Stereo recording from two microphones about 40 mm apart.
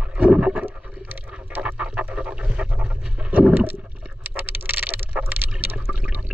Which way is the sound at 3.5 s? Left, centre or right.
Right.